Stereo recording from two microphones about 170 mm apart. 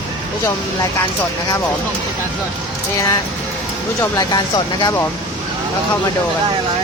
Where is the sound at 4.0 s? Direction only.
20° left (ahead or behind).